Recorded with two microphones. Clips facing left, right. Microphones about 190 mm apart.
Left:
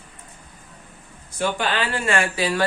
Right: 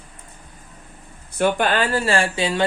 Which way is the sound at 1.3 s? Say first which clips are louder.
Right 5 dB; 55° right (ahead or behind).